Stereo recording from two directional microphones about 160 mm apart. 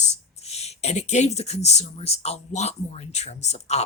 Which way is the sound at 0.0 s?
45° left (ahead or behind).